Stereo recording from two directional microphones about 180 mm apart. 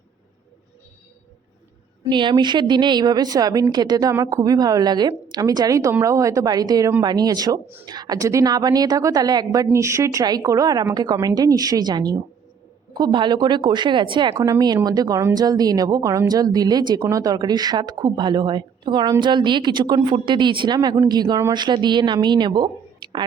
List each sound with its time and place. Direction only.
2.0 s speech: 25° right (ahead or behind)